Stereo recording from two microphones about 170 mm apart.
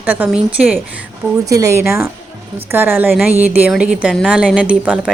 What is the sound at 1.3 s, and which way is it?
A woman's voice, 20° right (ahead or behind).